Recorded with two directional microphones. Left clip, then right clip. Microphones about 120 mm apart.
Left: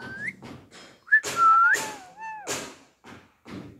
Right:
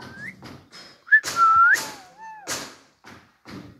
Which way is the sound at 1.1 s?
30° left (ahead or behind).